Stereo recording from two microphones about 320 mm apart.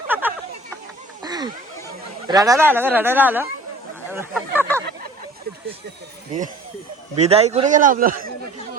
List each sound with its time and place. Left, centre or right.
0.1 s a sound: centre
2.2 s speech: centre
7.2 s a man's voice: centre